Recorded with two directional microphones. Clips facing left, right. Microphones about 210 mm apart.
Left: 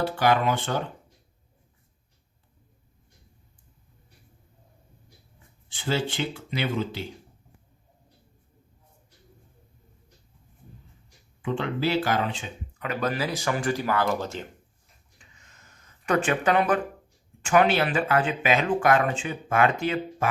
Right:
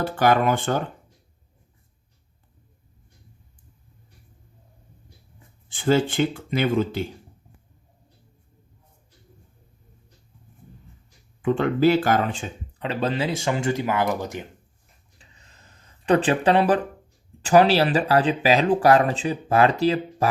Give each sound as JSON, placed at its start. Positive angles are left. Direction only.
{"t": 0.0, "sound": "speech", "side_deg": -50}
{"t": 5.7, "sound": "speech", "side_deg": -50}
{"t": 11.4, "sound": "speech", "side_deg": -50}
{"t": 12.8, "sound": "speech", "side_deg": -30}
{"t": 15.2, "sound": "a sound", "side_deg": -35}
{"t": 17.4, "sound": "speech", "side_deg": -35}